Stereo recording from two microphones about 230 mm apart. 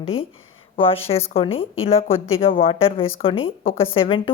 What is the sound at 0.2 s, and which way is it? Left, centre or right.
Speech, left.